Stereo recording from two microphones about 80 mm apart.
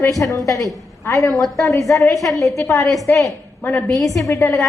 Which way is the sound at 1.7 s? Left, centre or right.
Left.